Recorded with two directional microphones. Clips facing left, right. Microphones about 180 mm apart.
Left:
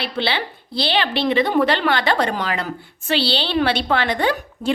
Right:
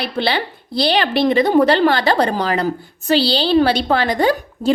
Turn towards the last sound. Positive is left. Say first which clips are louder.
# right 4 dB
turn(degrees=-40)  # may be behind; listen again after turning